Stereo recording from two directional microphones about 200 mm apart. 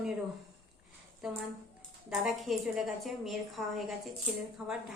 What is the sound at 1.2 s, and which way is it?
A woman's voice, centre (ahead or behind).